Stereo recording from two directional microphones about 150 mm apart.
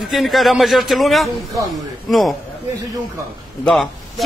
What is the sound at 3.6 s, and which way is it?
Speech, centre (ahead or behind).